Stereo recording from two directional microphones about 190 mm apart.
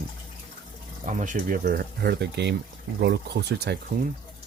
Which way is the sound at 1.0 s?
40° right (ahead or behind).